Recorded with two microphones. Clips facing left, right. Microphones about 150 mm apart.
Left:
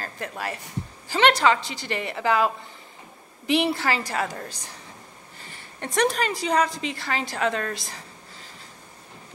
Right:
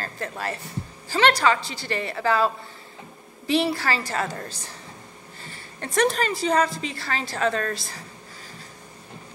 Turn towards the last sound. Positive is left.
turn(degrees=15)  # may be behind; listen again after turning